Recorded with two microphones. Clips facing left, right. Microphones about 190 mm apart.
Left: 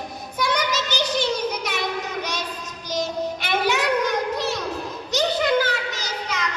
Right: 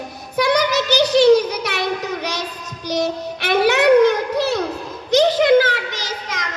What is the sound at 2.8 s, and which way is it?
Child singing, 65° right (ahead or behind).